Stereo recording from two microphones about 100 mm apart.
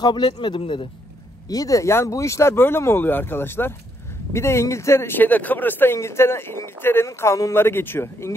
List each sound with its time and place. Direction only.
0.0 s speech: 50° left (ahead or behind)
1.5 s speech: 35° left (ahead or behind)